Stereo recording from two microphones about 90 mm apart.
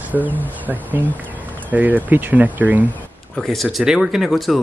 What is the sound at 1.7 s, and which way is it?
Speech, 20° right (ahead or behind).